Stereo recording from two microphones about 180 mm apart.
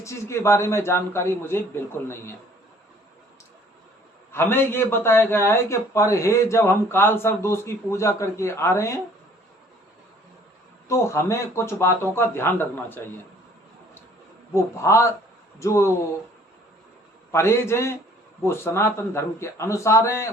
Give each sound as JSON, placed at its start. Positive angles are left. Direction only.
{"t": 0.0, "sound": "a man's voice", "side_deg": 15}
{"t": 4.3, "sound": "a man's voice", "side_deg": 15}
{"t": 10.8, "sound": "a man's voice", "side_deg": 15}
{"t": 14.5, "sound": "a man's voice", "side_deg": 15}
{"t": 17.3, "sound": "a man's voice", "side_deg": 15}